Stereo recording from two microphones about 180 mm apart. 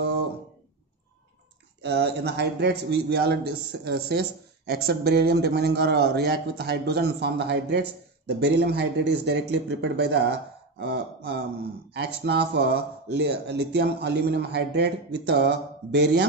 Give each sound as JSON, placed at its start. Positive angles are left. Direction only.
{"t": 1.8, "sound": "a man's voice", "side_deg": -65}